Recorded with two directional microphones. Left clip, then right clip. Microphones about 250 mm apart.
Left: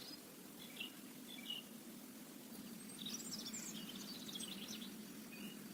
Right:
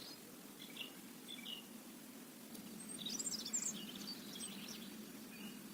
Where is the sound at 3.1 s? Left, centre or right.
Right.